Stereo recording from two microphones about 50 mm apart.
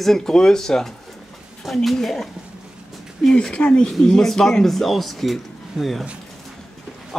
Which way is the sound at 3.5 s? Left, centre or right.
Left.